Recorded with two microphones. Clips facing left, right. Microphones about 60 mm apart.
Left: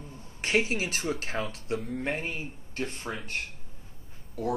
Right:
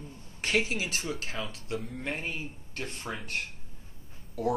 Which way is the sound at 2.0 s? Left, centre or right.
Left.